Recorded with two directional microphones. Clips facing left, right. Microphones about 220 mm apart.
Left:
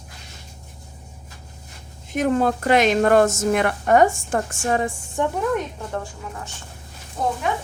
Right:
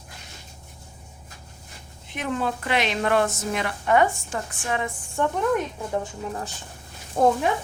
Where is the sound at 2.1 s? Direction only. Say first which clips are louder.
Left 8 dB; 45° left (ahead or behind).